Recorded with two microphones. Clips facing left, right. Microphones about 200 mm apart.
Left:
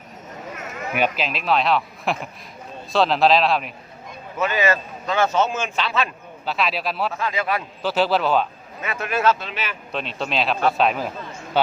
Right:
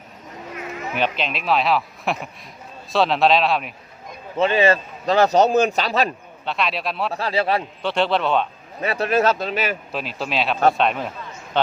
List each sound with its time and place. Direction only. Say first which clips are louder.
0.9 s speech: left 1 dB; 5° left (ahead or behind)
4.4 s a man's voice: right 4 dB; 30° right (ahead or behind)
6.4 s speech: even; centre (ahead or behind)
7.1 s a man's voice: right 3 dB; 35° right (ahead or behind)
7.8 s speech: left 4 dB; 5° left (ahead or behind)
8.8 s a man's voice: right 3 dB; 35° right (ahead or behind)
9.9 s speech: even; 5° right (ahead or behind)